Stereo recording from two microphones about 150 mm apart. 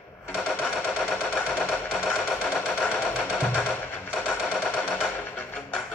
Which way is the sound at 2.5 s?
15° left (ahead or behind).